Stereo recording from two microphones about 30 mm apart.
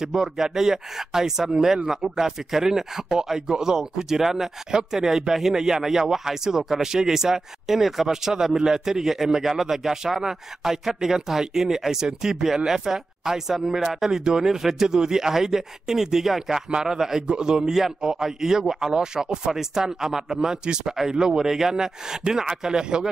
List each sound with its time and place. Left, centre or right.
0.0 s a man's voice: centre
8.1 s a man's voice: centre